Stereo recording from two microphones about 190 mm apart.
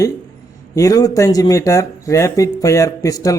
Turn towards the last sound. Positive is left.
turn(degrees=20)  # may be behind; listen again after turning